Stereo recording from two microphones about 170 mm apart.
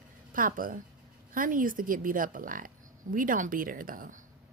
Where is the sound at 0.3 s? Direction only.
55° right (ahead or behind).